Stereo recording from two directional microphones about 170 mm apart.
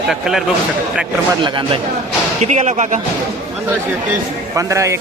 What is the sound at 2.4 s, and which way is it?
Speech, 40° right (ahead or behind).